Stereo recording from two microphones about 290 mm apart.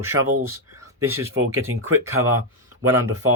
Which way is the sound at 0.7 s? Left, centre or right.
Centre.